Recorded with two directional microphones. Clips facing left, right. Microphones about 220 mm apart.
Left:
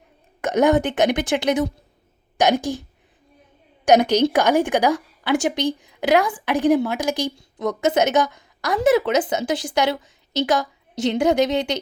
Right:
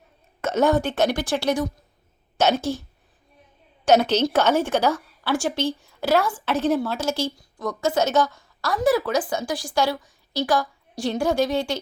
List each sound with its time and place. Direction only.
0.4 s a woman's voice: 15° left (ahead or behind)
3.8 s a woman's voice: 15° left (ahead or behind)